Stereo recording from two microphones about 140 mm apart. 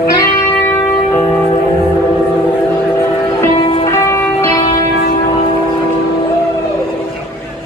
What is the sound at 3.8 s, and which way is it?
Music, 20° left (ahead or behind).